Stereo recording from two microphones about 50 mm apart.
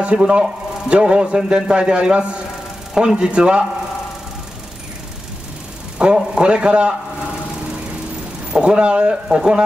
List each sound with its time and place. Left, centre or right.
0.0 s speech: right
6.0 s speech: right
8.5 s speech: right